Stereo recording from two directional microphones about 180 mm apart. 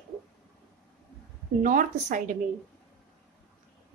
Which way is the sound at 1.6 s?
45° right (ahead or behind).